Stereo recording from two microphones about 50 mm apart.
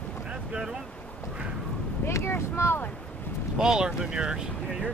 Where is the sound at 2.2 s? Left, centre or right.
Left.